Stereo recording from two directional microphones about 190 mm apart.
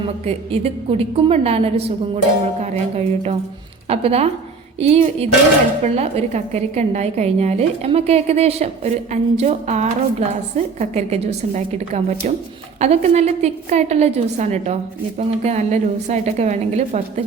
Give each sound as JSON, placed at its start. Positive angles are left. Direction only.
{"t": 0.3, "sound": "a woman's voice", "side_deg": -30}
{"t": 3.8, "sound": "a woman's voice", "side_deg": -30}